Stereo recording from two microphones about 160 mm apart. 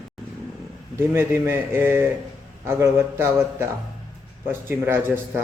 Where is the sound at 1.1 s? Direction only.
15° right (ahead or behind).